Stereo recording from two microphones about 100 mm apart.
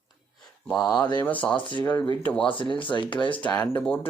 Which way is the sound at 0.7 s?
10° left (ahead or behind).